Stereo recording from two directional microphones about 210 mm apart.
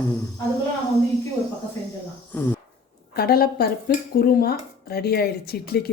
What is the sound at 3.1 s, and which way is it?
Speech, 45° left (ahead or behind).